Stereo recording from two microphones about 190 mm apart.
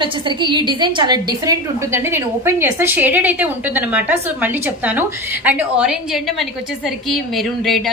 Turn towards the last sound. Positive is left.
turn(degrees=0)  # may be behind; listen again after turning